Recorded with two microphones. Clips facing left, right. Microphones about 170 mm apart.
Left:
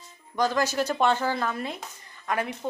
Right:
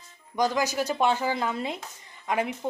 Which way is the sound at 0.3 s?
15° right (ahead or behind).